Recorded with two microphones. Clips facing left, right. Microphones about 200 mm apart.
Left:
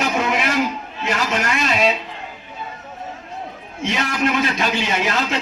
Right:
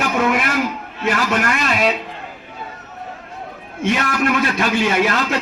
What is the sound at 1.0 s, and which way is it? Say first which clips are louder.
Speech: right 3 dB; 55° right (ahead or behind).